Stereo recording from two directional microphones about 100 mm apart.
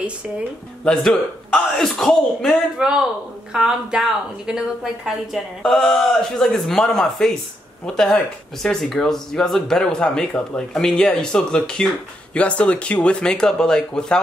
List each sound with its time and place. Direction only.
0.8 s a woman's voice: 5° left (ahead or behind)